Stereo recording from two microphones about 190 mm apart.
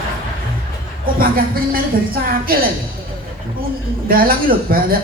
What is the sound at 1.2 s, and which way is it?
A woman's voice, 50° right (ahead or behind).